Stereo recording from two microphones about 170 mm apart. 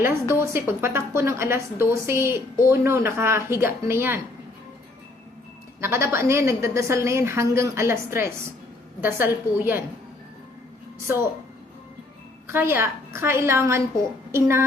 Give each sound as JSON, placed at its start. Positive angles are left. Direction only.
{"t": 0.3, "sound": "a woman's voice", "side_deg": -15}
{"t": 5.8, "sound": "a woman's voice", "side_deg": -15}
{"t": 11.0, "sound": "a woman's voice", "side_deg": -15}
{"t": 12.5, "sound": "a woman's voice", "side_deg": -15}